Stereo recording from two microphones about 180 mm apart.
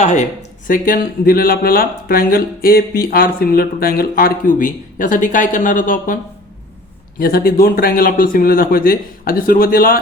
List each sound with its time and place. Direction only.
0.0 s speech: 40° left (ahead or behind)
0.7 s speech: 55° left (ahead or behind)
7.2 s speech: 55° left (ahead or behind)